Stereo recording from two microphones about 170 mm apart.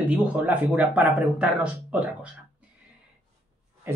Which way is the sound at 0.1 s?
5° right (ahead or behind).